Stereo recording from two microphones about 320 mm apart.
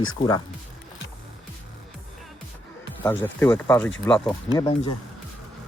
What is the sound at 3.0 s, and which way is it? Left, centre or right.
Speech, centre.